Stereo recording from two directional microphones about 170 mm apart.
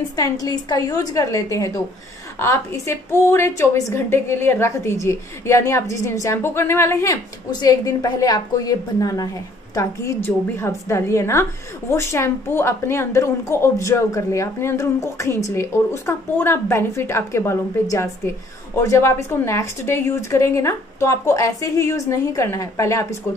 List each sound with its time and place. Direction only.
0.1 s a woman's voice: 20° left (ahead or behind)